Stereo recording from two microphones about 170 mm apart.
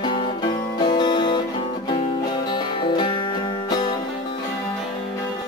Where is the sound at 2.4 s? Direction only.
25° left (ahead or behind).